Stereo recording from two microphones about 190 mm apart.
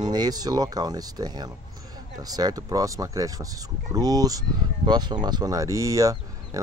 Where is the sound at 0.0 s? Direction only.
20° right (ahead or behind).